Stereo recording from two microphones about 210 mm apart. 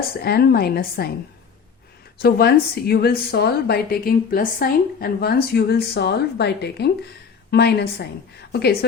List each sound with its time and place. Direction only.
0.2 s a woman's voice: 50° left (ahead or behind)
2.2 s a woman's voice: 50° left (ahead or behind)